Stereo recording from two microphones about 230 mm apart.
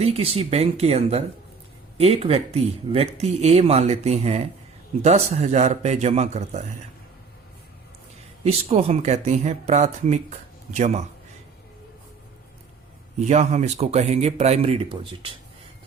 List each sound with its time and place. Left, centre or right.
0.0 s speech: right
8.4 s speech: right
13.1 s speech: right